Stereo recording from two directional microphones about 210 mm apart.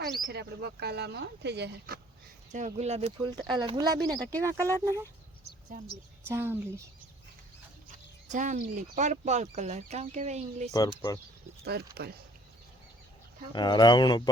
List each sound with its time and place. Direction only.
0.2 s speech: 50° right (ahead or behind)
2.5 s speech: 35° right (ahead or behind)
4.2 s speech: 5° left (ahead or behind)
4.4 s speech: 15° right (ahead or behind)
6.2 s speech: 10° right (ahead or behind)
7.9 s speech: 35° right (ahead or behind)
10.7 s speech: 15° left (ahead or behind)
12.0 s speech: 50° right (ahead or behind)
13.5 s speech: 20° left (ahead or behind)